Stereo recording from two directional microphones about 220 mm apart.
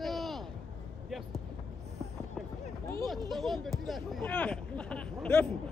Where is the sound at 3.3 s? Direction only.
Centre (ahead or behind).